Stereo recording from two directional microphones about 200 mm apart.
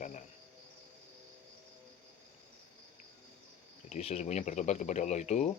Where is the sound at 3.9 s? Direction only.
30° left (ahead or behind).